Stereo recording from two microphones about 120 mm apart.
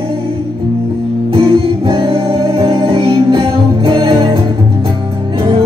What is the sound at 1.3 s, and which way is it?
Music, 45° right (ahead or behind).